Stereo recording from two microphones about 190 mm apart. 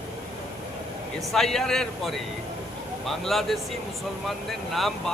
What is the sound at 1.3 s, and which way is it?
Speech, centre (ahead or behind).